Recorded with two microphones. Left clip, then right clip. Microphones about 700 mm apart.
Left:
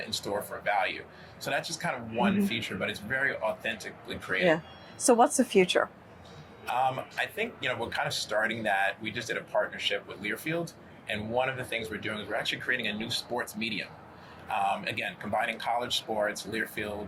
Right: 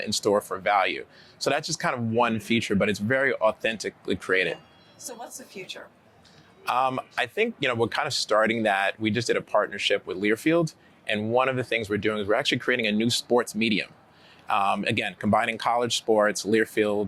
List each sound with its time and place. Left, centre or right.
0.1 s a man's voice: right
4.9 s a woman's voice: left
6.7 s a man's voice: right